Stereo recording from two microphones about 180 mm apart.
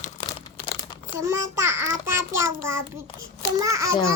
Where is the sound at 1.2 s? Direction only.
15° right (ahead or behind).